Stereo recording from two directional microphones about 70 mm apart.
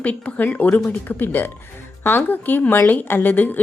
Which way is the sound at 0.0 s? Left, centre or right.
Left.